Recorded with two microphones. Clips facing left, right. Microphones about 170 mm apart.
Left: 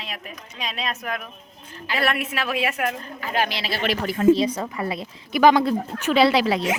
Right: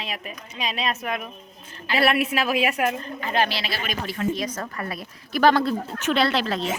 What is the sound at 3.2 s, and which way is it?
Speech, 10° left (ahead or behind).